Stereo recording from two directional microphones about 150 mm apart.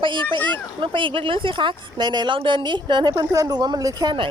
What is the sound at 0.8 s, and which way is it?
A woman's voice, 35° right (ahead or behind).